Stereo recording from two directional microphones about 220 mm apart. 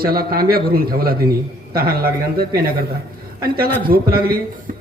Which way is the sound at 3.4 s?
45° right (ahead or behind).